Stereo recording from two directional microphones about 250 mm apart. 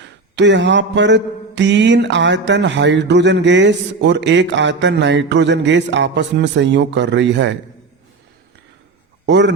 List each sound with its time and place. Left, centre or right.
0.3 s a man's voice: right
9.2 s a man's voice: right